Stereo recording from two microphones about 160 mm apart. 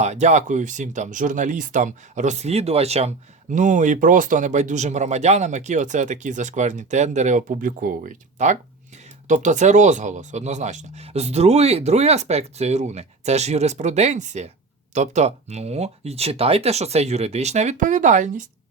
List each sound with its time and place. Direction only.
0.0 s speech: 45° right (ahead or behind)